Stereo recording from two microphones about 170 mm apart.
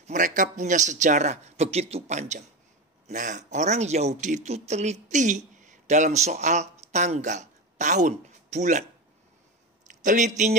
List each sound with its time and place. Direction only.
0.0 s speech: 45° right (ahead or behind)
10.0 s speech: 45° right (ahead or behind)